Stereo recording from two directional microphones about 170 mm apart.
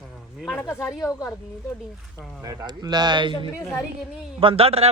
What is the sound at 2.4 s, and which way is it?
Speech, 20° right (ahead or behind).